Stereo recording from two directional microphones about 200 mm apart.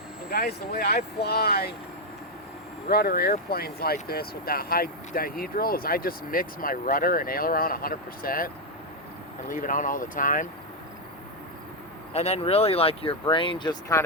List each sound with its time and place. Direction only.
0.3 s speech: 50° left (ahead or behind)
2.9 s speech: 50° left (ahead or behind)
9.5 s speech: 40° left (ahead or behind)
12.1 s speech: 30° left (ahead or behind)